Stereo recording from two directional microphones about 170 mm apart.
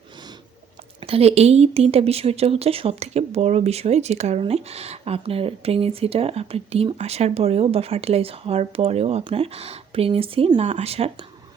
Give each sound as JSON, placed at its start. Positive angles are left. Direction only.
{"t": 1.0, "sound": "speech", "side_deg": -35}